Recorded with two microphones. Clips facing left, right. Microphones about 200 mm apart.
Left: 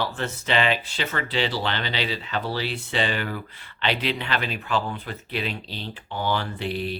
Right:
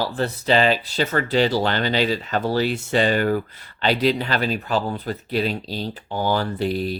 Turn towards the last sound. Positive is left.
turn(degrees=-40)  # may be behind; listen again after turning